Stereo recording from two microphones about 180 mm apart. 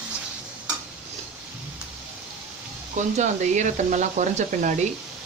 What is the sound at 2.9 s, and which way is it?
Speech, 40° right (ahead or behind).